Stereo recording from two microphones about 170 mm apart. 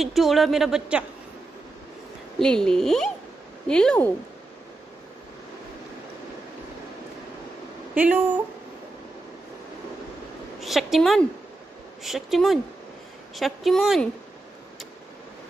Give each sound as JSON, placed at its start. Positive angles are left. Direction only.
{"t": 0.0, "sound": "a woman's voice", "side_deg": 0}
{"t": 2.3, "sound": "a woman's voice", "side_deg": 5}
{"t": 7.9, "sound": "speech", "side_deg": -10}
{"t": 10.6, "sound": "a woman's voice", "side_deg": 0}